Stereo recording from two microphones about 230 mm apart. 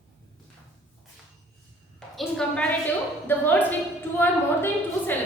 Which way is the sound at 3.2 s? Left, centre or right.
Centre.